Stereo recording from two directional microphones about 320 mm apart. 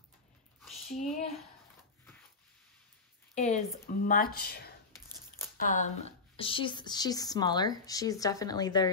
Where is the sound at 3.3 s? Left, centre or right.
Left.